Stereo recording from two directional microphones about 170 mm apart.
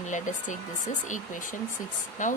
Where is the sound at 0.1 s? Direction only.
45° left (ahead or behind).